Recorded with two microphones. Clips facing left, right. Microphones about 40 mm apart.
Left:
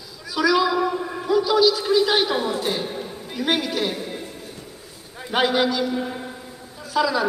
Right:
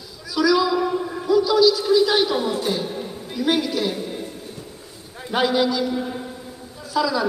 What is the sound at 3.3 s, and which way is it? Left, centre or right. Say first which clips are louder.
A man's voice: right 2 dB; centre.